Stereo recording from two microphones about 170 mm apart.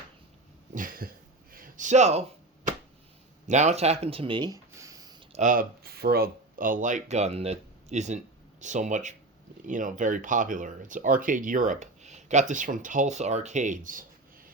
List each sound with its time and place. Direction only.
0.7 s cough: 55° right (ahead or behind)
1.5 s a man's voice: 55° right (ahead or behind)
3.4 s speech: 45° right (ahead or behind); by 5.1 s 20° right (ahead or behind)
5.3 s speech: 50° right (ahead or behind)